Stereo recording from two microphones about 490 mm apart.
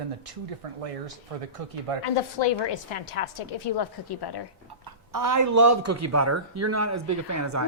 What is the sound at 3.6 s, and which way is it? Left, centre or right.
Speech, left.